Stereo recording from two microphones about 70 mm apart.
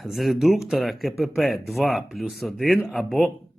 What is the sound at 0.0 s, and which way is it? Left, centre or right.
A man's voice, centre.